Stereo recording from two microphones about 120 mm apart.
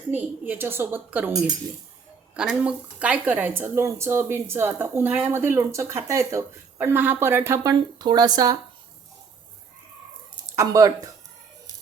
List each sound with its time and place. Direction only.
0.1 s a woman's voice: 15° right (ahead or behind); by 8.5 s 35° right (ahead or behind)
10.5 s speech: 25° right (ahead or behind)